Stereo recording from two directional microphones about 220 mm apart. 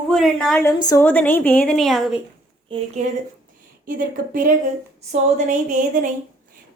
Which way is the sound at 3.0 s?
30° right (ahead or behind).